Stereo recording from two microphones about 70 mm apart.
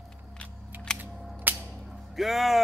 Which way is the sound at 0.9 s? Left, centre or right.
Centre.